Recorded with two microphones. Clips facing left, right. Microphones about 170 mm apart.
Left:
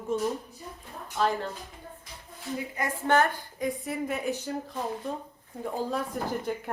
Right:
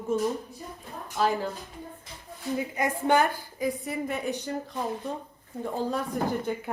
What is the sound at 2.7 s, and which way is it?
Speech, 15° right (ahead or behind).